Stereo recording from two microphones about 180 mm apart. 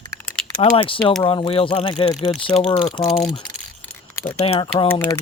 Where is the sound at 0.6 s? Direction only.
30° left (ahead or behind).